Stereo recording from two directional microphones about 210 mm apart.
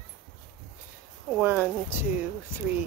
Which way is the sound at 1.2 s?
5° right (ahead or behind).